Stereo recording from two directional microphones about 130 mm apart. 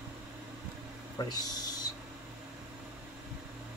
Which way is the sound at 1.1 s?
30° left (ahead or behind).